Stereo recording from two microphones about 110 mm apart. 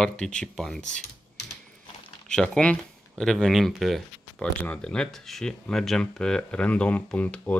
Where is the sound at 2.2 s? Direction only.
5° left (ahead or behind).